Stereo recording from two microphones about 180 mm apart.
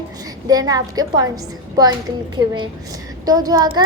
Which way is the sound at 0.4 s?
20° right (ahead or behind).